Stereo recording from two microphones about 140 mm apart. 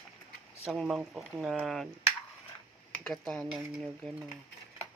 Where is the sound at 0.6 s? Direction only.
5° right (ahead or behind).